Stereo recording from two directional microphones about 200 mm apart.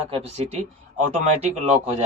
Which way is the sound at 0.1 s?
30° right (ahead or behind).